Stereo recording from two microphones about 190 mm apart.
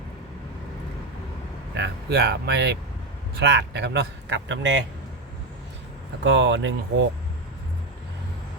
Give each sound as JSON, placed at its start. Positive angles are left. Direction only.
{"t": 1.7, "sound": "speech", "side_deg": -65}
{"t": 6.2, "sound": "speech", "side_deg": -70}